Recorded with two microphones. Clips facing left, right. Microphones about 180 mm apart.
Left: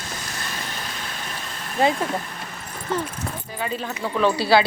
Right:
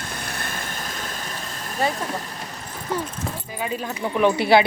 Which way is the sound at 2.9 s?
10° right (ahead or behind).